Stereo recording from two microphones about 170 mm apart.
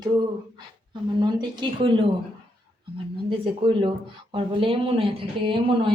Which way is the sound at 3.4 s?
30° right (ahead or behind).